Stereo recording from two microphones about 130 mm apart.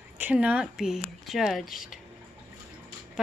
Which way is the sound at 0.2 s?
10° right (ahead or behind).